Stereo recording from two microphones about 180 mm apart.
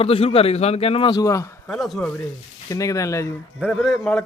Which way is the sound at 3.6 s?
5° left (ahead or behind).